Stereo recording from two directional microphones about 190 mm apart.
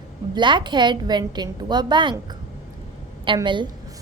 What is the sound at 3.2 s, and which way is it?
Speech, 25° right (ahead or behind).